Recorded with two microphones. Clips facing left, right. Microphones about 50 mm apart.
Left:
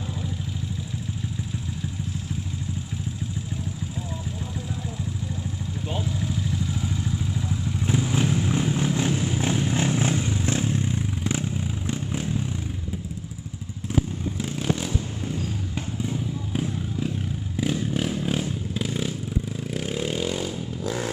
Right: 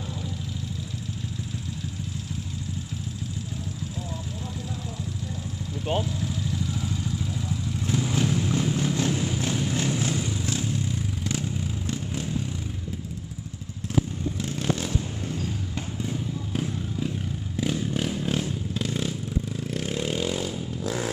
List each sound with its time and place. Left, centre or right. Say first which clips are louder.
7.4 s vehicle: left 2 dB; centre
14.4 s vehicle: left 2 dB; centre